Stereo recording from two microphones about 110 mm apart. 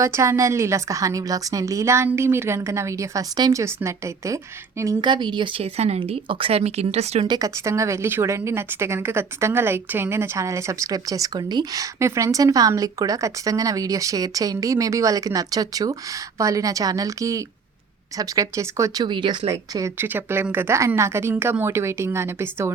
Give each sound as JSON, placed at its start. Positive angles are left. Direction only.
{"t": 0.0, "sound": "a woman's voice", "side_deg": -25}
{"t": 3.6, "sound": "a woman's voice", "side_deg": -25}
{"t": 4.9, "sound": "speech", "side_deg": -45}
{"t": 5.6, "sound": "speech", "side_deg": -75}
{"t": 6.0, "sound": "speech", "side_deg": -50}
{"t": 7.3, "sound": "a woman's voice", "side_deg": -35}
{"t": 19.0, "sound": "speech", "side_deg": -45}
{"t": 19.5, "sound": "a woman's voice", "side_deg": -30}